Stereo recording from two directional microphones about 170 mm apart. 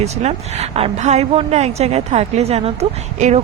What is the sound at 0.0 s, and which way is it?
Speech, 40° right (ahead or behind).